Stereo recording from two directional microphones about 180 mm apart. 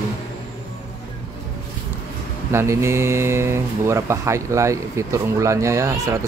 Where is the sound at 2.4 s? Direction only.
15° right (ahead or behind).